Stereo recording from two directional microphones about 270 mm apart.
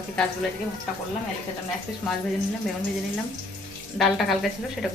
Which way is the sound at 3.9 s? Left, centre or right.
Centre.